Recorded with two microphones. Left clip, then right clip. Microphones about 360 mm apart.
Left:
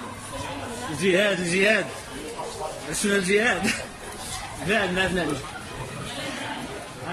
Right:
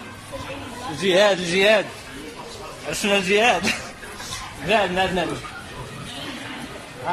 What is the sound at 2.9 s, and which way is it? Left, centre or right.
Speech, centre.